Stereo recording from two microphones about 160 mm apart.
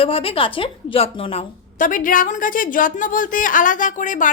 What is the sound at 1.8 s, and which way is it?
A woman's voice, 55° left (ahead or behind).